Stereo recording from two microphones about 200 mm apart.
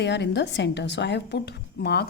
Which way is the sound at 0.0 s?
60° left (ahead or behind).